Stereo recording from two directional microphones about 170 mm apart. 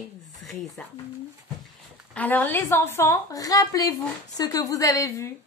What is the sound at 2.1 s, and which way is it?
A woman's voice, 10° left (ahead or behind).